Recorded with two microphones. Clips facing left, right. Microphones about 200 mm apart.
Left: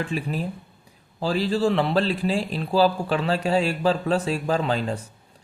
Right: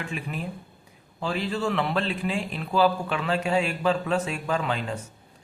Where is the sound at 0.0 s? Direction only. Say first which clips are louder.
Left 5 dB; 35° left (ahead or behind).